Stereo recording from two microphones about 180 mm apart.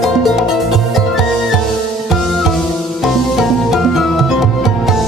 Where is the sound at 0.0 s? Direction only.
Centre (ahead or behind).